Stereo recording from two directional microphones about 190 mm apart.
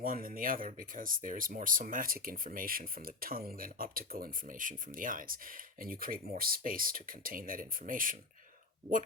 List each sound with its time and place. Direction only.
0.0 s speech: 50° right (ahead or behind)